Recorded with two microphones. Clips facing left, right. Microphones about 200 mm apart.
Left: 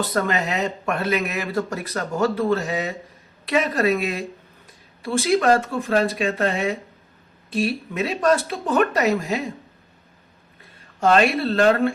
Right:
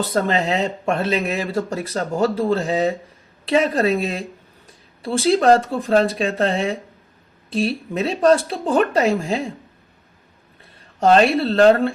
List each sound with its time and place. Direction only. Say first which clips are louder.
0.1 s speech: right 3 dB; 30° right (ahead or behind)
11.0 s speech: right 3 dB; 35° right (ahead or behind)